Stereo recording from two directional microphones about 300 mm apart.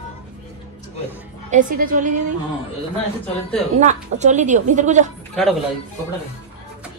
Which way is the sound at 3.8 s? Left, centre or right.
Right.